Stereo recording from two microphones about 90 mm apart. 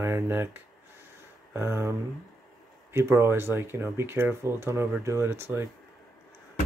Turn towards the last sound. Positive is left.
turn(degrees=-25)  # may be behind; listen again after turning